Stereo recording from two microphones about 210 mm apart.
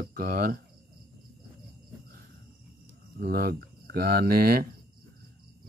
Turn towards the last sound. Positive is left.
turn(degrees=-45)  # may be behind; listen again after turning